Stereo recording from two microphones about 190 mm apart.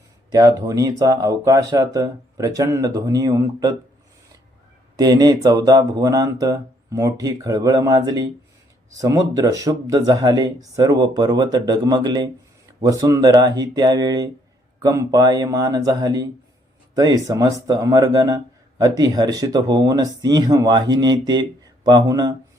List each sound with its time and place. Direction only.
0.3 s speech: 20° right (ahead or behind)
4.9 s speech: 20° right (ahead or behind)